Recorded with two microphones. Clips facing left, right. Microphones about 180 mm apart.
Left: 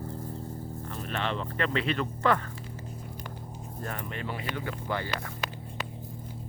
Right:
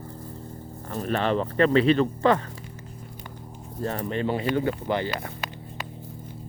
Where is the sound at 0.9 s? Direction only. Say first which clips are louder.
Right 9 dB; 40° right (ahead or behind).